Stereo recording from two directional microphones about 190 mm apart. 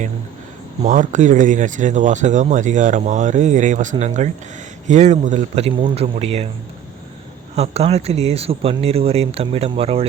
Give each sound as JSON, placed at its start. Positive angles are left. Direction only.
{"t": 0.8, "sound": "speech", "side_deg": -40}
{"t": 7.5, "sound": "speech", "side_deg": -35}